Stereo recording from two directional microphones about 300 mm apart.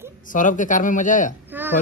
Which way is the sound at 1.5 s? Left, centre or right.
Centre.